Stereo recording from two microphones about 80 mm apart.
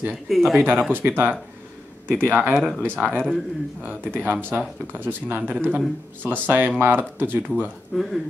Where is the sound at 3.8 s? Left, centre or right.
Right.